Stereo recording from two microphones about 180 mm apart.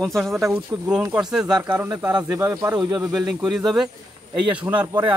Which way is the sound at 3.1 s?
5° right (ahead or behind).